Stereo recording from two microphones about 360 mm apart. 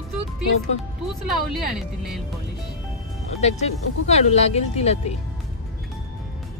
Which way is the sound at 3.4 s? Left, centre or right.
Centre.